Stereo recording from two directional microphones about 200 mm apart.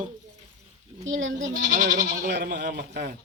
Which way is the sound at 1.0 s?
75° right (ahead or behind).